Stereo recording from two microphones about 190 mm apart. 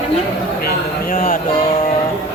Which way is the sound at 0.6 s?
50° left (ahead or behind).